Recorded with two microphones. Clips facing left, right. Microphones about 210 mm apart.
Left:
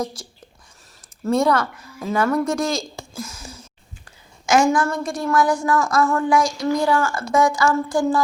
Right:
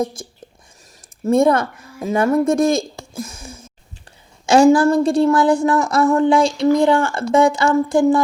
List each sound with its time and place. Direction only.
1.5 s a woman's voice: 25° right (ahead or behind)
3.2 s a sound: 30° right (ahead or behind)
4.4 s a woman's voice: 30° right (ahead or behind)